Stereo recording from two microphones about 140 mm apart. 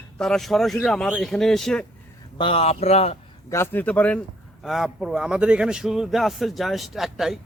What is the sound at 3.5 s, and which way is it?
Speech, 15° left (ahead or behind).